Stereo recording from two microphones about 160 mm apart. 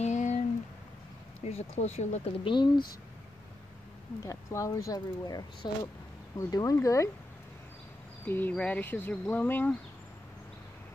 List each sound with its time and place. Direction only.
0.0 s a sound: 45° left (ahead or behind)
1.4 s speech: 40° left (ahead or behind)
2.4 s speech: 30° left (ahead or behind)
4.2 s speech: 20° left (ahead or behind)
8.3 s speech: 10° left (ahead or behind)